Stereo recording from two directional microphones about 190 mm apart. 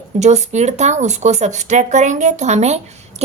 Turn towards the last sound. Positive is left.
turn(degrees=-35)  # may be behind; listen again after turning